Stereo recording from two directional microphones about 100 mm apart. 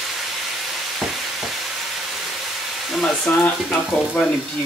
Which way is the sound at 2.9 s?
5° left (ahead or behind).